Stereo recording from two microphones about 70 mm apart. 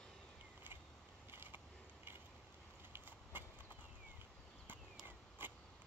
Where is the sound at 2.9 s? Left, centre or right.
Right.